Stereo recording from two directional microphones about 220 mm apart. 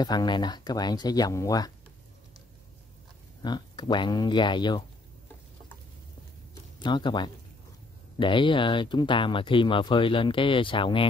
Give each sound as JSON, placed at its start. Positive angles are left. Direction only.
{"t": 0.0, "sound": "speech", "side_deg": 20}
{"t": 3.4, "sound": "speech", "side_deg": 20}
{"t": 6.8, "sound": "speech", "side_deg": 20}